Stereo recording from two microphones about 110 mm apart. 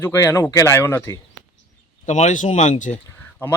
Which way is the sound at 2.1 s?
90° left.